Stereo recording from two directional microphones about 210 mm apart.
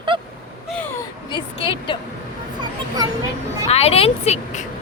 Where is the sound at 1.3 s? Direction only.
25° left (ahead or behind).